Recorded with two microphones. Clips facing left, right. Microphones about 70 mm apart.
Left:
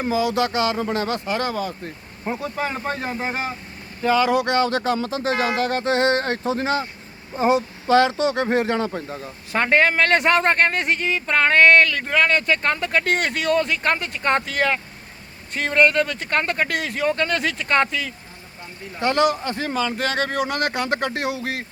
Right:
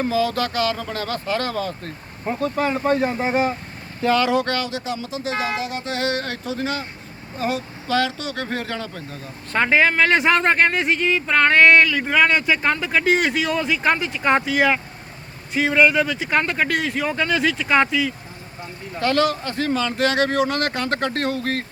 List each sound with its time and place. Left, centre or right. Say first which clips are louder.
0.0 s speech: even; centre
4.6 s speech: left 6 dB; left
5.5 s speech: left 5 dB; left
5.8 s speech: left 6 dB; left
9.5 s speech: right 1 dB; centre
18.9 s speech: even; centre